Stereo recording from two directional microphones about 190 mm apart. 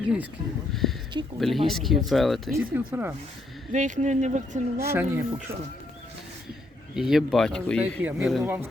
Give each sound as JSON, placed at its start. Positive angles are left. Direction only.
{"t": 0.7, "sound": "speech", "side_deg": 0}
{"t": 2.7, "sound": "speech", "side_deg": -10}
{"t": 3.7, "sound": "speech", "side_deg": -40}
{"t": 4.8, "sound": "speech", "side_deg": -15}
{"t": 6.9, "sound": "speech", "side_deg": 0}